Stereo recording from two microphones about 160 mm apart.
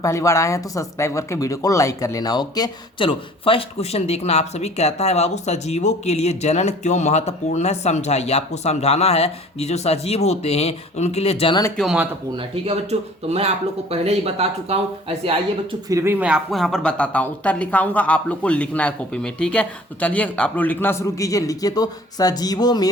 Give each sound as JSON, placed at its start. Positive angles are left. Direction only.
{"t": 0.0, "sound": "speech", "side_deg": 20}
{"t": 11.8, "sound": "speech", "side_deg": -5}
{"t": 12.4, "sound": "speech", "side_deg": -40}
{"t": 15.9, "sound": "speech", "side_deg": -15}